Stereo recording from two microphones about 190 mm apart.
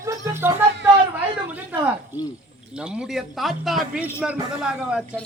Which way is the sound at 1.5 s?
10° right (ahead or behind).